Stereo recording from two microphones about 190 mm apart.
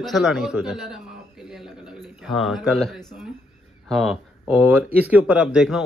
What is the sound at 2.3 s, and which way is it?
Speech, centre (ahead or behind).